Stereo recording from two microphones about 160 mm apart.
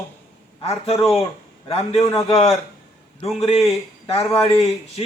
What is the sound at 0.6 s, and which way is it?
Speech, 40° left (ahead or behind).